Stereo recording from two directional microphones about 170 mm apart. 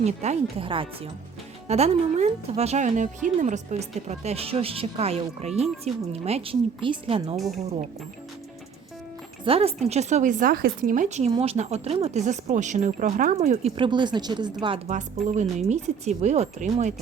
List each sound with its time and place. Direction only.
0.0 s a woman's voice: 40° right (ahead or behind)
9.4 s a woman's voice: 35° right (ahead or behind)
14.8 s a woman's voice: 45° right (ahead or behind)